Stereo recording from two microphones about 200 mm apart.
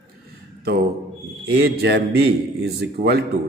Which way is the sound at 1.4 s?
55° right (ahead or behind).